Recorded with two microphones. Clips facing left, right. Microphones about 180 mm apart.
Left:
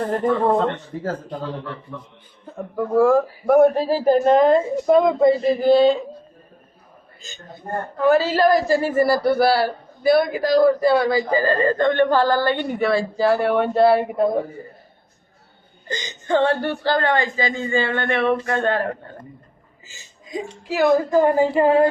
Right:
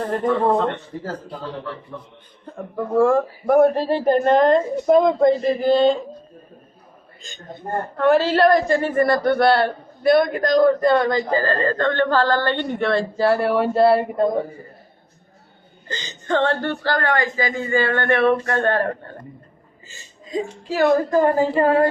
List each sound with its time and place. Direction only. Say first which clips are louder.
2.5 s a woman's voice: left 1 dB; centre (ahead or behind)
7.9 s a woman's voice: right 1 dB; centre (ahead or behind)
15.9 s speech: left 2 dB; 15° left (ahead or behind)
20.3 s speech: right 2 dB; 10° left (ahead or behind)